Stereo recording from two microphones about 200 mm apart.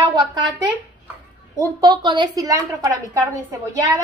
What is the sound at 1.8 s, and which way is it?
A woman's voice, 20° right (ahead or behind).